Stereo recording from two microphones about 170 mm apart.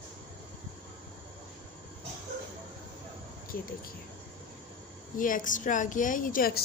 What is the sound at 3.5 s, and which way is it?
Speech, 60° left (ahead or behind).